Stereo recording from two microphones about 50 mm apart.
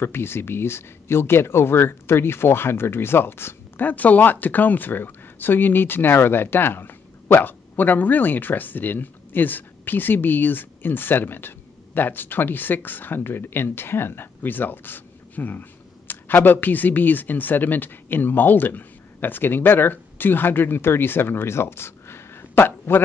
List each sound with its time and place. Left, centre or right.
0.0 s speech: left
3.8 s speech: left